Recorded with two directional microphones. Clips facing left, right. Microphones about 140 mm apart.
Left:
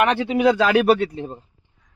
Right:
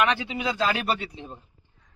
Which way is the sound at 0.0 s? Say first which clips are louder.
Left 8 dB; 60° left (ahead or behind).